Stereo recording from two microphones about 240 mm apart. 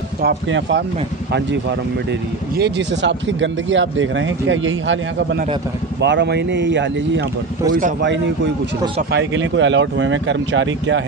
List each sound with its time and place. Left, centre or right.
0.2 s speech: right
9.1 s speech: right